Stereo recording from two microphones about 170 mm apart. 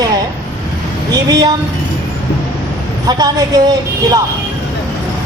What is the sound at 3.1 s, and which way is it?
A man's voice, 20° right (ahead or behind).